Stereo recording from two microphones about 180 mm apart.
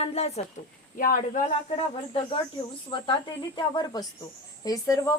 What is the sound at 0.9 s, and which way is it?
Speech, 50° left (ahead or behind).